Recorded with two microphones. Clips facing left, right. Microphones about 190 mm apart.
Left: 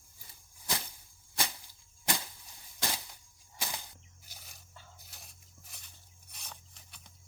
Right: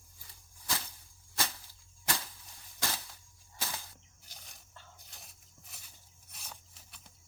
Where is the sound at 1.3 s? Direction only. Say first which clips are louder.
Even; 15° left (ahead or behind).